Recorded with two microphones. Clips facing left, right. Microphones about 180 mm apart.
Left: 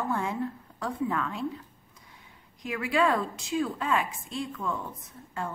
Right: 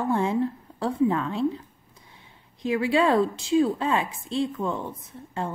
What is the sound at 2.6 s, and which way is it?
A woman's voice, 30° right (ahead or behind).